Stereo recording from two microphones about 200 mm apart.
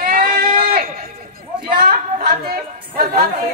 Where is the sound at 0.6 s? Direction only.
50° right (ahead or behind).